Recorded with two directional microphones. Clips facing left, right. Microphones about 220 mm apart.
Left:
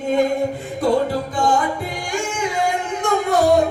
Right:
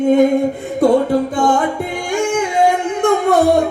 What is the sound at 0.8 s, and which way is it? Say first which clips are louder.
Music: right 6 dB; 55° right (ahead or behind).